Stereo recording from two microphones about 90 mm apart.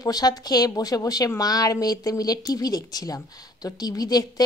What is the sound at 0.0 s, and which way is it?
A woman's voice, 45° left (ahead or behind).